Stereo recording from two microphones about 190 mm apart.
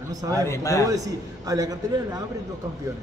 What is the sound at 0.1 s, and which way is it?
Speech, 20° right (ahead or behind).